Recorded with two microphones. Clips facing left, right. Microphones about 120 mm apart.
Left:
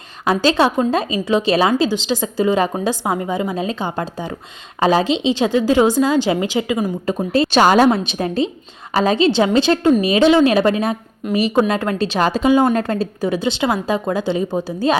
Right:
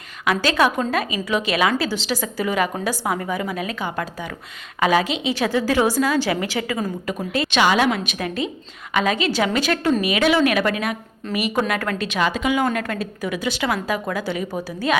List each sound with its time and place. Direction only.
0.3 s a woman's voice: 30° left (ahead or behind)
7.3 s a woman's voice: 35° left (ahead or behind)